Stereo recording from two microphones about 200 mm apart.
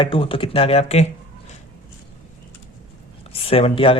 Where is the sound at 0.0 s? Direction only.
25° left (ahead or behind).